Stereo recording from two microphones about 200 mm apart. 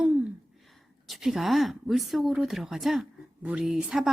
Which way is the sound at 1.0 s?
Centre (ahead or behind).